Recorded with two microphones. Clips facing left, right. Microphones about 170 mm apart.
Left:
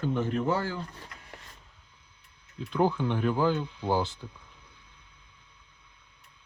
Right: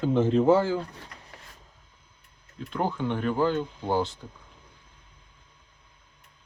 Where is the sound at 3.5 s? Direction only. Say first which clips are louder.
Right 4 dB; 45° right (ahead or behind).